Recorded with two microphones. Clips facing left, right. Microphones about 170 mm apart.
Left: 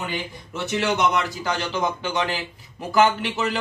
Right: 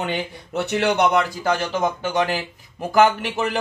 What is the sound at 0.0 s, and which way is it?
Speech, 65° right (ahead or behind).